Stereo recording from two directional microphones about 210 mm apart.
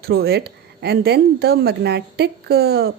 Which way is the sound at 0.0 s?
50° right (ahead or behind).